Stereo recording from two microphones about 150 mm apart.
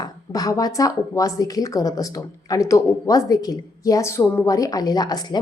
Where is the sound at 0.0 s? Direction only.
25° left (ahead or behind).